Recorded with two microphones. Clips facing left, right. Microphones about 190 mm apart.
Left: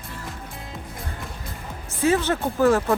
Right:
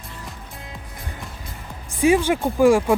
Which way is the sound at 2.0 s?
10° right (ahead or behind).